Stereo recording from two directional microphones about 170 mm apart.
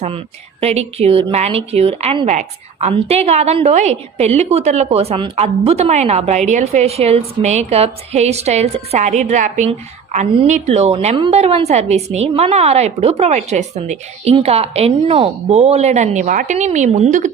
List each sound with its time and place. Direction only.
0.6 s a woman's voice: 40° right (ahead or behind)